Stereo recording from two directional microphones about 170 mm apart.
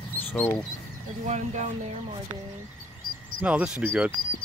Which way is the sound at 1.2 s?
45° right (ahead or behind).